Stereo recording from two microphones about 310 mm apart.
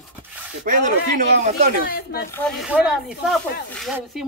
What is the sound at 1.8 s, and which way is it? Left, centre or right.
Speech, left.